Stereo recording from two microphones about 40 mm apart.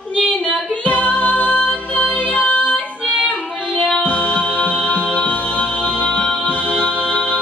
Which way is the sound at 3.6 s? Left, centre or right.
Left.